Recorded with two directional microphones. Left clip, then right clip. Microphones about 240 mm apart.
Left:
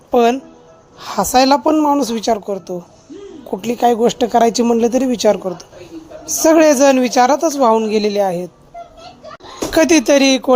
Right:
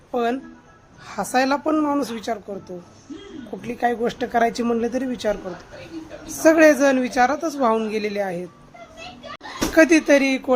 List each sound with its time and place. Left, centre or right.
0.1 s speech: left
9.7 s speech: left